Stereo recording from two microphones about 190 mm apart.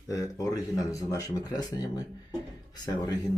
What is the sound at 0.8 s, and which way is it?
Speech, 15° left (ahead or behind).